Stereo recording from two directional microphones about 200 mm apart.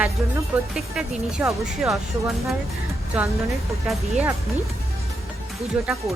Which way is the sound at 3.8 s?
5° right (ahead or behind).